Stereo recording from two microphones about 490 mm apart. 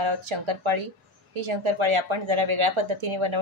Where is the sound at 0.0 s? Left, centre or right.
Right.